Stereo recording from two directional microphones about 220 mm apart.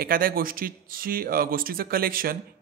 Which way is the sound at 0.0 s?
40° right (ahead or behind).